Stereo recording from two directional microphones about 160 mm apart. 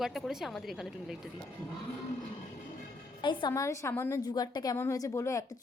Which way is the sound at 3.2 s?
30° left (ahead or behind).